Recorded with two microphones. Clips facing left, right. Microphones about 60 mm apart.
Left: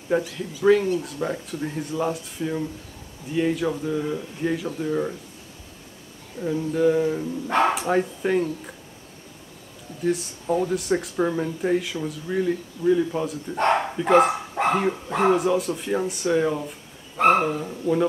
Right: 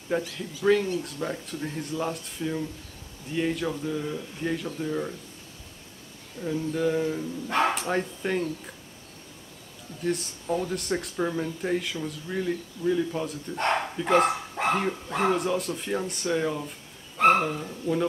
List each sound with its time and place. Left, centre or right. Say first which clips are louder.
0.1 s speech: left 5 dB; centre
6.4 s speech: left 5 dB; centre
7.4 s speech: left 4 dB; left
7.7 s speech: left 5 dB; centre
10.4 s speech: left 6 dB; centre
15.3 s speech: left 5 dB; centre